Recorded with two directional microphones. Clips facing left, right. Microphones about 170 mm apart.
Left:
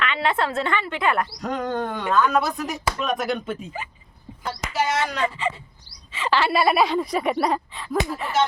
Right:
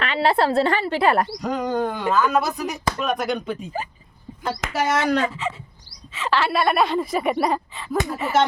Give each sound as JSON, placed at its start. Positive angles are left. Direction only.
{"t": 0.0, "sound": "speech", "side_deg": -35}
{"t": 1.4, "sound": "speech", "side_deg": 0}
{"t": 4.6, "sound": "speech", "side_deg": -55}
{"t": 5.3, "sound": "speech", "side_deg": 0}